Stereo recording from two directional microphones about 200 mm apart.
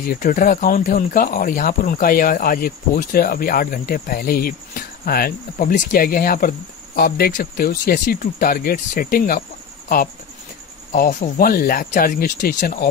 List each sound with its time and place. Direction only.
0.0 s speech: 45° left (ahead or behind)
10.9 s speech: 40° left (ahead or behind)